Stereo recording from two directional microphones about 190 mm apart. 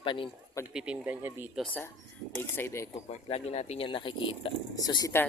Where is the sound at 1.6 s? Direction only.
10° left (ahead or behind).